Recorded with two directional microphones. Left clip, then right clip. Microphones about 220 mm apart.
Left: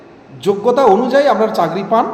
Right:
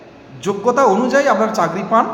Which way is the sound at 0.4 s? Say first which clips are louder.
Left 3 dB; 5° right (ahead or behind).